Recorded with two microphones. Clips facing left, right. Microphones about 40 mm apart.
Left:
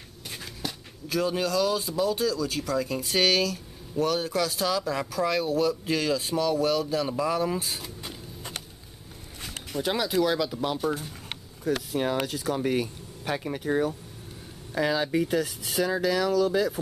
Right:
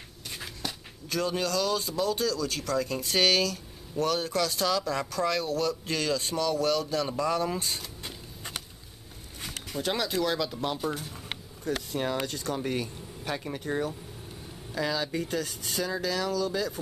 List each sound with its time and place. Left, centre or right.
0.6 s speech: centre
9.8 s speech: centre
14.7 s speech: centre